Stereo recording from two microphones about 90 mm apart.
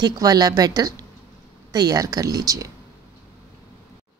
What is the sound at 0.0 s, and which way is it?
A woman's voice, 45° right (ahead or behind).